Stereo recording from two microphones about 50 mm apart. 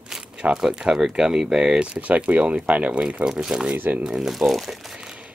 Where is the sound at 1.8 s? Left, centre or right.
Right.